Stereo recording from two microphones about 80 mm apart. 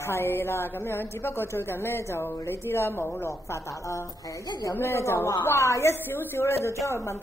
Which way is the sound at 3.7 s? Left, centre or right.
Left.